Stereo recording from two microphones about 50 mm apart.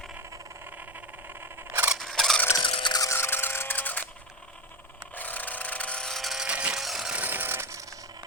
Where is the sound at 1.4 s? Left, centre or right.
Right.